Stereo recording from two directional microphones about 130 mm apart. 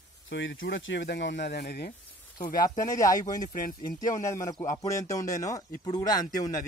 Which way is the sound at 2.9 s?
25° left (ahead or behind).